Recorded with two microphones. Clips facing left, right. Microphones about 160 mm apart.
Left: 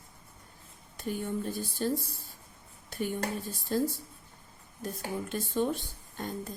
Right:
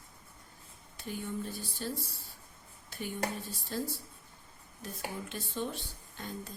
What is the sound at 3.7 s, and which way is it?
A woman's voice, 45° left (ahead or behind).